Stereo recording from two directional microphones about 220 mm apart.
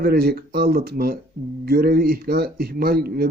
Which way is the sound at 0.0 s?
45° right (ahead or behind).